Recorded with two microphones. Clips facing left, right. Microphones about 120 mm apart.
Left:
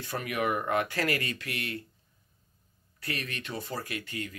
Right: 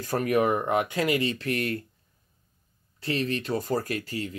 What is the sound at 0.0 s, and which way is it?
Speech, 40° right (ahead or behind).